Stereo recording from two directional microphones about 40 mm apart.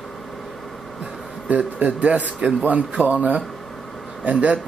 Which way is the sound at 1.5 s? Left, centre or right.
Right.